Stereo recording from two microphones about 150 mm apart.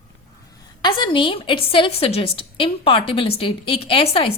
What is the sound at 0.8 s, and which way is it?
A woman's voice, 30° left (ahead or behind).